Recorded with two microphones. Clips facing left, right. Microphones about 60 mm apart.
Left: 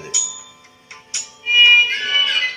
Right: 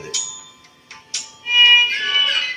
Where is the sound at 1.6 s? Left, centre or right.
Centre.